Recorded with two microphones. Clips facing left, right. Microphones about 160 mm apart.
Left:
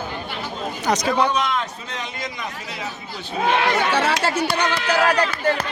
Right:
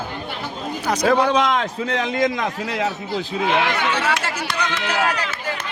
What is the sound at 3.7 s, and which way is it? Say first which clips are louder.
Speech: left 2 dB; 35° left (ahead or behind).